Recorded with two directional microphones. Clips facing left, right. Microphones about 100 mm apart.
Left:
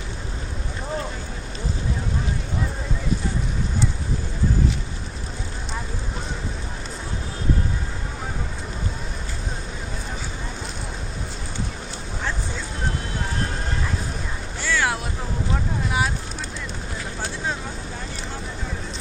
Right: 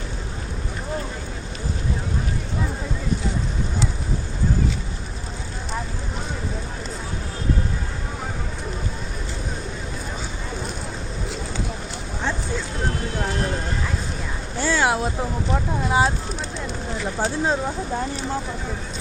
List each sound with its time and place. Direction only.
14.6 s vehicle: 30° right (ahead or behind)
17.2 s vehicle: 30° right (ahead or behind)